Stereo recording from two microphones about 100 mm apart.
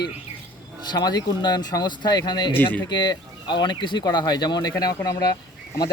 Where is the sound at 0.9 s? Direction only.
40° left (ahead or behind).